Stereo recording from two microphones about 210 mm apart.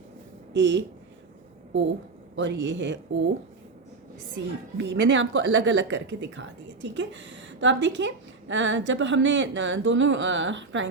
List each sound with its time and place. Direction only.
0.5 s a woman's voice: 60° right (ahead or behind)
4.4 s a woman's voice: 55° right (ahead or behind)